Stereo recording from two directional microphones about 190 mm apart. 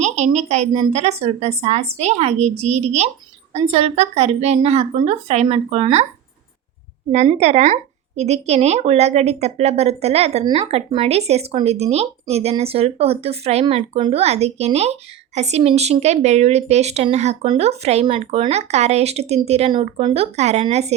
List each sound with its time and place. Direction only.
0.0 s speech: 35° right (ahead or behind)
7.3 s speech: 35° right (ahead or behind)